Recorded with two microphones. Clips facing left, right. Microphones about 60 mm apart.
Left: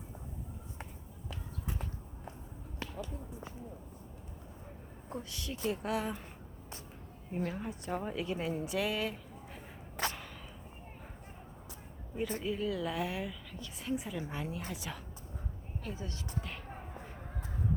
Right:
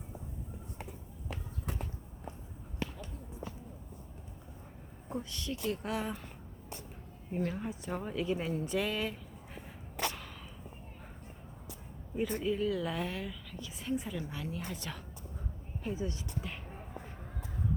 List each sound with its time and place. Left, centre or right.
5.0 s a woman's voice: centre
7.3 s a woman's voice: centre
12.1 s a woman's voice: centre
14.2 s a woman's voice: left
14.5 s a woman's voice: centre
15.8 s speech: centre